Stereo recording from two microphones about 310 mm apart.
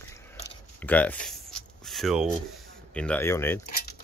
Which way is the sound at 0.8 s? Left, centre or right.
Centre.